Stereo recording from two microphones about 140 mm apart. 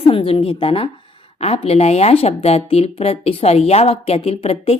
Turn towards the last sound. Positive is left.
turn(degrees=45)  # may be behind; listen again after turning